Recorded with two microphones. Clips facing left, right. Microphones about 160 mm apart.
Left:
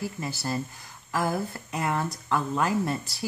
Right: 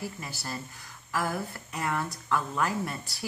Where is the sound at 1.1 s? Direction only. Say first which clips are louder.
Left 4 dB; 20° left (ahead or behind).